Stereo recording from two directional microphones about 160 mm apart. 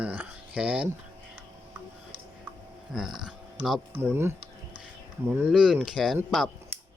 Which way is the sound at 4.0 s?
15° right (ahead or behind).